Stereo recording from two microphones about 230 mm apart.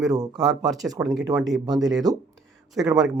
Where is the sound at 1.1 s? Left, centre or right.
Centre.